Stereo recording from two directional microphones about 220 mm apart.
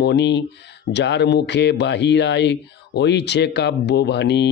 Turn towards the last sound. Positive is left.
turn(degrees=50)  # may be behind; listen again after turning